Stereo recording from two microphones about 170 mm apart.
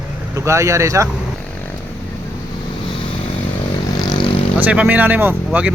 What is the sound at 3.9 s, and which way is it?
Vehicle, 25° left (ahead or behind).